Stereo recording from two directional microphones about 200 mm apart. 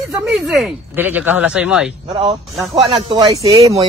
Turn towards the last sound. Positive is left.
turn(degrees=-15)  # may be behind; listen again after turning